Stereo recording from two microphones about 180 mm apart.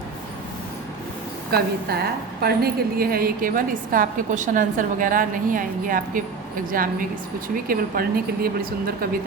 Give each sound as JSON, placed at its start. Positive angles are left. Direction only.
{"t": 1.5, "sound": "a woman's voice", "side_deg": -60}